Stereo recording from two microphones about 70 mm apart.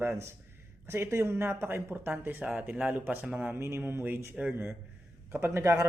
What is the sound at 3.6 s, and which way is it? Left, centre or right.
Speech, right.